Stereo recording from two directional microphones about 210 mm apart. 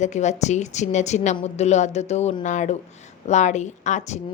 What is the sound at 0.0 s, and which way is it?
A woman's voice, 35° left (ahead or behind).